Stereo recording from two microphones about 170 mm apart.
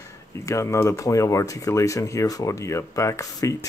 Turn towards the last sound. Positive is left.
turn(degrees=20)  # may be behind; listen again after turning